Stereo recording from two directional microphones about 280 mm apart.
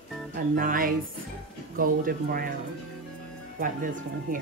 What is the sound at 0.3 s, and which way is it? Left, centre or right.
Speech, right.